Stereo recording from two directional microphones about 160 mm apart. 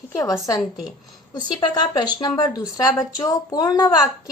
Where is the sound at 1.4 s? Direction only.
25° left (ahead or behind).